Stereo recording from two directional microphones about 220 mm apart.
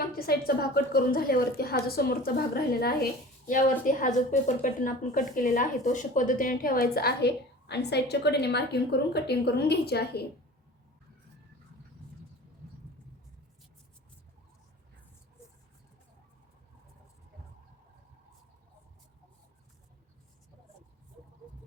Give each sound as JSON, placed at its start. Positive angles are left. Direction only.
{"t": 0.1, "sound": "a woman's voice", "side_deg": 45}